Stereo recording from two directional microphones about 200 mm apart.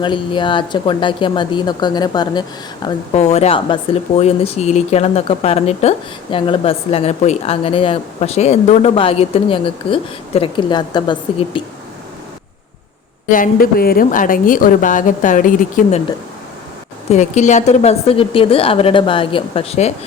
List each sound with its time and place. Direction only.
0.0 s a woman's voice: 25° left (ahead or behind)
13.3 s a woman's voice: 45° left (ahead or behind)
17.1 s a woman's voice: 35° left (ahead or behind)